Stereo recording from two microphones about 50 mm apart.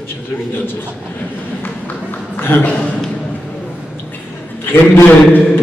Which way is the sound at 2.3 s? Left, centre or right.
Left.